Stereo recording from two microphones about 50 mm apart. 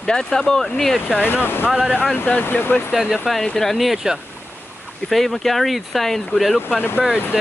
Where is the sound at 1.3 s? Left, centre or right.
Left.